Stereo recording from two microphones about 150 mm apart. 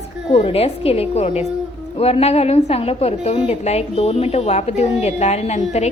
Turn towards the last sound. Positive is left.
turn(degrees=45)  # may be behind; listen again after turning